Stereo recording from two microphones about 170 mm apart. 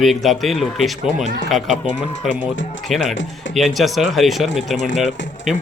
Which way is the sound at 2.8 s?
Centre (ahead or behind).